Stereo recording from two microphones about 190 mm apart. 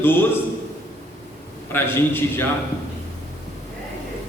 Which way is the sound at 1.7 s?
10° left (ahead or behind).